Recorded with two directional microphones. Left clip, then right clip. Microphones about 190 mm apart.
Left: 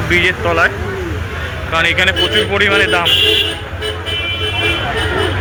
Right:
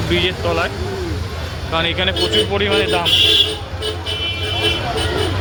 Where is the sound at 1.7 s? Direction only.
20° right (ahead or behind).